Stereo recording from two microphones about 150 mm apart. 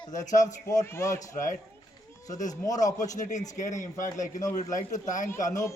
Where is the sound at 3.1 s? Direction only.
55° left (ahead or behind).